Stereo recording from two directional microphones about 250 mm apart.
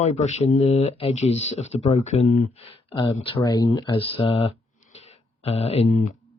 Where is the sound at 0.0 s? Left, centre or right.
Left.